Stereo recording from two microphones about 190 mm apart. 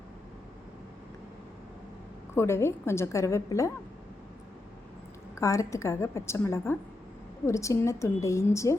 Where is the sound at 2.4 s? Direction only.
15° left (ahead or behind).